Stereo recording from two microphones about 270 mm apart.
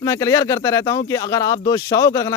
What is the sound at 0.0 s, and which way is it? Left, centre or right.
Speech, centre.